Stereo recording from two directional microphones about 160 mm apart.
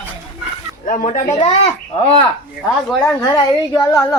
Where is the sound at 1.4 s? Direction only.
35° left (ahead or behind).